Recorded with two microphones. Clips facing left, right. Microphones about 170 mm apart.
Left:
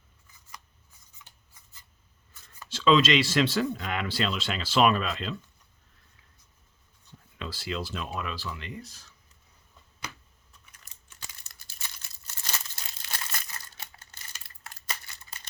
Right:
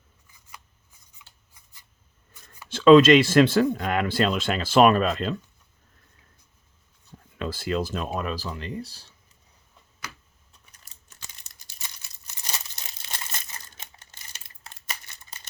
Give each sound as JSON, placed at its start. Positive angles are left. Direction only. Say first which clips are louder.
{"t": 2.6, "sound": "speech", "louder": "right 9 dB", "side_deg": -55}
{"t": 7.3, "sound": "speech", "louder": "right 7 dB", "side_deg": -50}
{"t": 10.7, "sound": "scissors", "louder": "right 1 dB", "side_deg": -35}
{"t": 11.3, "sound": "crumpling", "louder": "even", "side_deg": -20}